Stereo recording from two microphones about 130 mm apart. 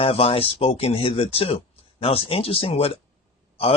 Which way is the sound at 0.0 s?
45° left (ahead or behind).